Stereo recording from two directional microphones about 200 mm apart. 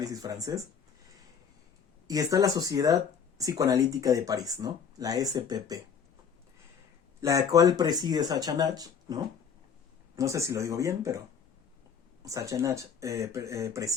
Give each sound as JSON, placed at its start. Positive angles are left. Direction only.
{"t": 0.0, "sound": "speech", "side_deg": -20}
{"t": 2.0, "sound": "speech", "side_deg": -15}
{"t": 7.2, "sound": "speech", "side_deg": -15}
{"t": 12.2, "sound": "speech", "side_deg": -15}